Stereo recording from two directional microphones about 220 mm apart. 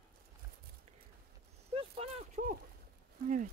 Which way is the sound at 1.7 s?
25° right (ahead or behind).